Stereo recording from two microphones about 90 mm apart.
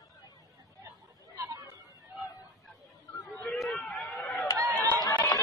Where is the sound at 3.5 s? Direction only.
5° left (ahead or behind).